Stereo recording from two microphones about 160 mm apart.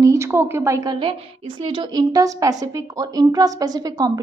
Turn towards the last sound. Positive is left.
turn(degrees=-25)  # may be behind; listen again after turning